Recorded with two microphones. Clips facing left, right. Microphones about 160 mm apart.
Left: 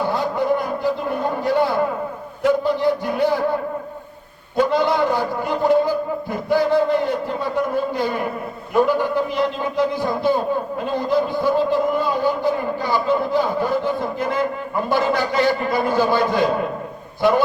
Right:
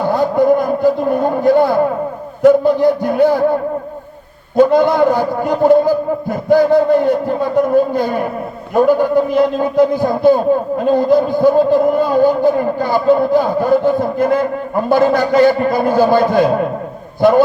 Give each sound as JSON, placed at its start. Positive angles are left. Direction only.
{"t": 0.1, "sound": "a man's voice", "side_deg": -50}
{"t": 4.5, "sound": "a man's voice", "side_deg": -50}